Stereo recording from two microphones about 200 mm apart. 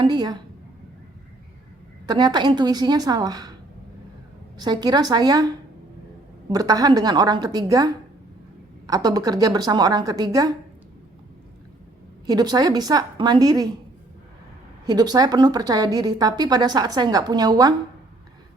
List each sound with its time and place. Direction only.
0.0 s a woman's voice: 20° right (ahead or behind)
2.0 s a woman's voice: 20° right (ahead or behind)
4.5 s a woman's voice: 20° right (ahead or behind)
6.5 s a woman's voice: 20° right (ahead or behind)
12.2 s a woman's voice: 20° right (ahead or behind)
14.8 s a woman's voice: 20° right (ahead or behind)